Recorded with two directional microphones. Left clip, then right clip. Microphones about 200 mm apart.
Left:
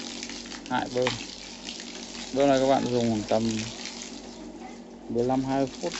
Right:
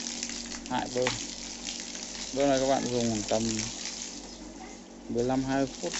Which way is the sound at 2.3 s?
5° left (ahead or behind).